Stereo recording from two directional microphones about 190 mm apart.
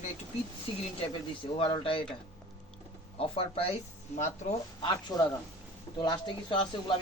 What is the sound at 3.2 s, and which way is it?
Speech, 30° left (ahead or behind).